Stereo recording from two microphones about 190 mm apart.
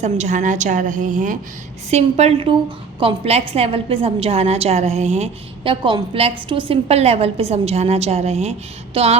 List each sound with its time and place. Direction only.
0.0 s a woman's voice: 40° right (ahead or behind)